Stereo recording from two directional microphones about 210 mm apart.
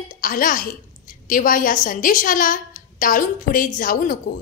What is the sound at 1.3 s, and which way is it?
A woman's voice, 40° left (ahead or behind).